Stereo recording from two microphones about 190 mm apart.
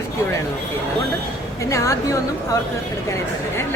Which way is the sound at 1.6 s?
15° left (ahead or behind).